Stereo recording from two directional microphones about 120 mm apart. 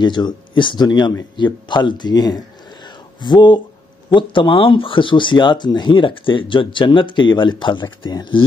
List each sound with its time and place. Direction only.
0.0 s speech: 40° left (ahead or behind)